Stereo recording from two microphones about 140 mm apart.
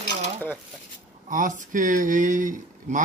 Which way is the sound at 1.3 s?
65° right (ahead or behind).